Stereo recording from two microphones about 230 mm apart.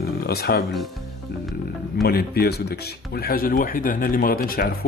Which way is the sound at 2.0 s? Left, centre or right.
Left.